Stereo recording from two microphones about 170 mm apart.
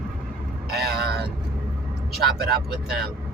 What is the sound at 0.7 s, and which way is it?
Vehicle, 70° right (ahead or behind).